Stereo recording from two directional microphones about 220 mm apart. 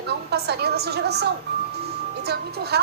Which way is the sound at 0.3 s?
50° right (ahead or behind).